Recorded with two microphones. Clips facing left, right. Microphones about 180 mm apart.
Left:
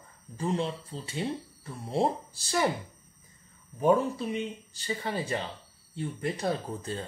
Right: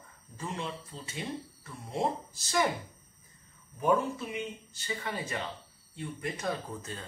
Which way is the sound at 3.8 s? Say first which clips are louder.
Left 4 dB; 35° left (ahead or behind).